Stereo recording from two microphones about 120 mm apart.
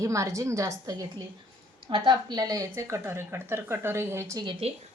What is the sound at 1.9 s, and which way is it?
Speech, 40° right (ahead or behind).